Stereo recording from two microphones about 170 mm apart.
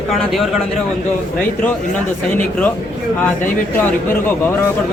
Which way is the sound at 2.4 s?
10° left (ahead or behind).